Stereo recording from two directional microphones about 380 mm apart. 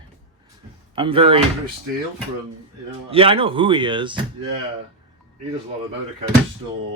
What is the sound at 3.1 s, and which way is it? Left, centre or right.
Speech, centre.